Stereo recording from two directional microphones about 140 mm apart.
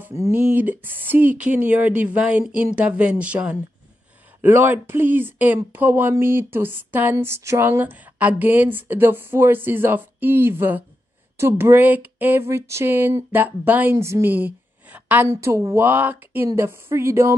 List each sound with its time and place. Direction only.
0.0 s speech: 15° right (ahead or behind)